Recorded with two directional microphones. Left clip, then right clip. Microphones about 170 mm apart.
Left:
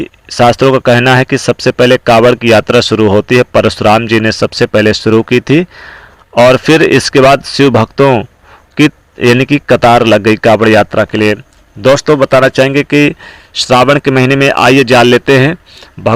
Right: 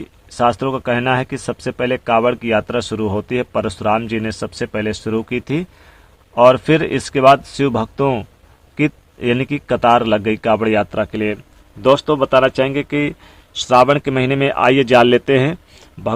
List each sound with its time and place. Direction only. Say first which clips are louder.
0.0 s speech: left 8 dB; 30° left (ahead or behind)